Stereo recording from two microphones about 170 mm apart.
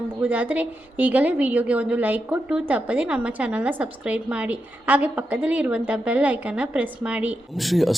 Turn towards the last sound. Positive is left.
turn(degrees=0)  # may be behind; listen again after turning